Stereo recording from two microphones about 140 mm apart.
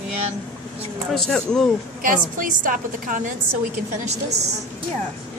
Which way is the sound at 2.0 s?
75° right (ahead or behind).